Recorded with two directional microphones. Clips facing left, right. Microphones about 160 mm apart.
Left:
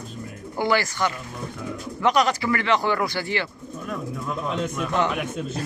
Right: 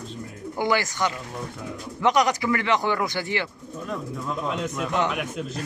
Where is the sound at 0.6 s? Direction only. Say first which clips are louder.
Left 1 dB; 20° right (ahead or behind).